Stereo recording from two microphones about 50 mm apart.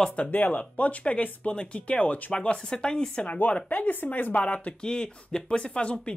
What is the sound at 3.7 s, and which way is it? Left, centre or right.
Speech, left.